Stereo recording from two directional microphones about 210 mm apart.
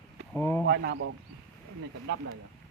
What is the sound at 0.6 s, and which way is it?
Speech, 55° right (ahead or behind).